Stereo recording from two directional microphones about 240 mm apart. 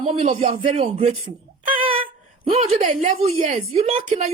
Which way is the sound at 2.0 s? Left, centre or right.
Right.